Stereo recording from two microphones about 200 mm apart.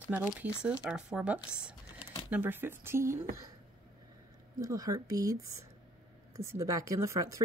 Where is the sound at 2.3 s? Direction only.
10° right (ahead or behind).